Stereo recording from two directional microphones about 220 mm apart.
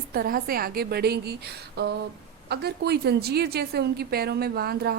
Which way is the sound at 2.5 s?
50° right (ahead or behind).